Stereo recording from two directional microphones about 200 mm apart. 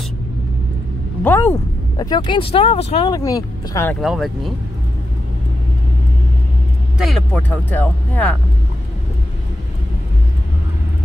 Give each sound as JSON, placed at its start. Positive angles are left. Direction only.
{"t": 1.2, "sound": "speech", "side_deg": 10}
{"t": 3.2, "sound": "speech", "side_deg": 15}
{"t": 4.0, "sound": "speech", "side_deg": 0}
{"t": 7.0, "sound": "speech", "side_deg": 0}